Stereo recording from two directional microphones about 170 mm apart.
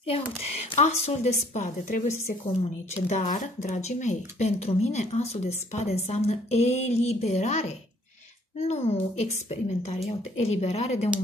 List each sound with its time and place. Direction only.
0.0 s speech: 35° left (ahead or behind)